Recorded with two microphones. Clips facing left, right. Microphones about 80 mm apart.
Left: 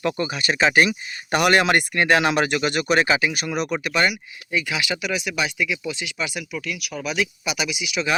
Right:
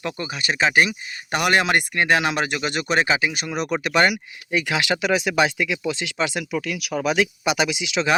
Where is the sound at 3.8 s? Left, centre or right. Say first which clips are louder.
Right 3 dB; right.